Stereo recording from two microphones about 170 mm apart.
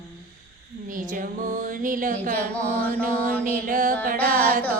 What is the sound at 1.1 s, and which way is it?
Music, 50° right (ahead or behind).